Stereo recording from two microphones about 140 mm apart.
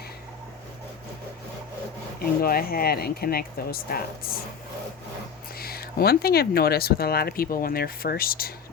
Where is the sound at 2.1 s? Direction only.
90° left.